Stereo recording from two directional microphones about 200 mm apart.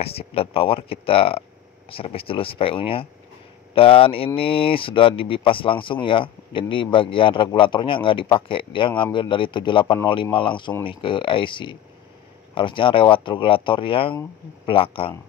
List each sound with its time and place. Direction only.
0.0 s a man's voice: 30° left (ahead or behind)